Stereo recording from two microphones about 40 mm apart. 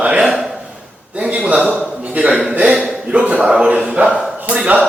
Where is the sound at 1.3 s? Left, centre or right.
Right.